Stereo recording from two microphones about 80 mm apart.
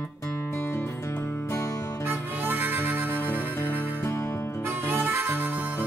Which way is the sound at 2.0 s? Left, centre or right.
Right.